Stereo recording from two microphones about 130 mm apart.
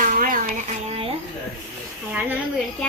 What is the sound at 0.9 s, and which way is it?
Speech, 50° right (ahead or behind).